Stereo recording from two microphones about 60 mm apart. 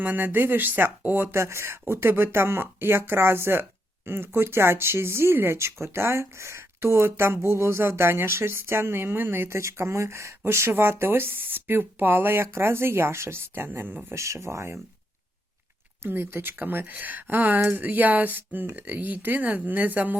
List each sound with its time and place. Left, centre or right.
0.0 s speech: right
14.2 s speech: right
16.0 s speech: right